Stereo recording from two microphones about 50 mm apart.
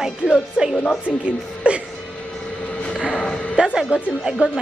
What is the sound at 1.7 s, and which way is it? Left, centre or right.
Music, right.